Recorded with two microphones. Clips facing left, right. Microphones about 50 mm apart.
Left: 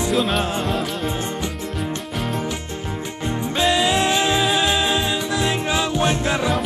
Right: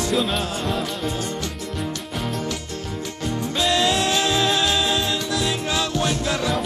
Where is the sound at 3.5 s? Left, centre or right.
Centre.